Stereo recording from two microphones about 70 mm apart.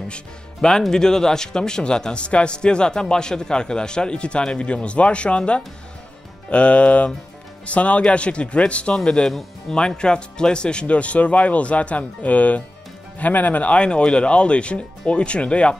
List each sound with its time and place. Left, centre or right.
0.1 s speech: centre